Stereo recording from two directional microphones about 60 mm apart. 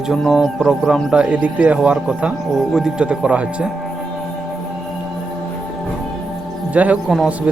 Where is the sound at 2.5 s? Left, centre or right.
Centre.